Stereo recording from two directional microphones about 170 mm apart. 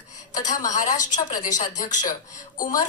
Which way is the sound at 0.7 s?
50° left (ahead or behind).